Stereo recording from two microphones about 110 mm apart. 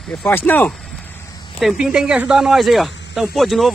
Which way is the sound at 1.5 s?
5° right (ahead or behind).